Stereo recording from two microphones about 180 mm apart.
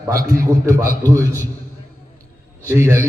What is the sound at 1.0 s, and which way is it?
Speech, 10° left (ahead or behind).